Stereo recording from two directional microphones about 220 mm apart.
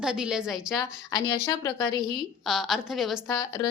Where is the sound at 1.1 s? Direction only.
15° left (ahead or behind).